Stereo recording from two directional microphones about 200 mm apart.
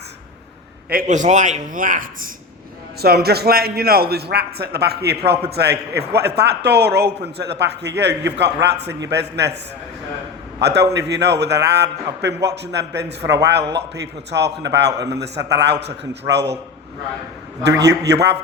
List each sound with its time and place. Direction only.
0.9 s a man's voice: 40° right (ahead or behind)
3.2 s a man's voice: 50° right (ahead or behind)
10.6 s a man's voice: 55° right (ahead or behind)
17.6 s a man's voice: 60° right (ahead or behind)